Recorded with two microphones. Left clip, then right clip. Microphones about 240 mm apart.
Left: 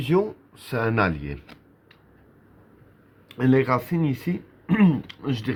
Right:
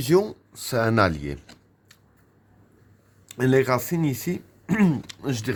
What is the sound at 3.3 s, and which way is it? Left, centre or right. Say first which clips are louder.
Speech: even; right.